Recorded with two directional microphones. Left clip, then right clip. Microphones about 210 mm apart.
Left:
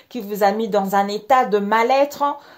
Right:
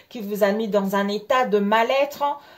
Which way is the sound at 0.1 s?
30° left (ahead or behind).